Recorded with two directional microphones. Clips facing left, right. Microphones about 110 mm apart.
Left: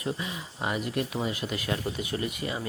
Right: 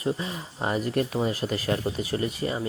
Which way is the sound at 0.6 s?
40° right (ahead or behind).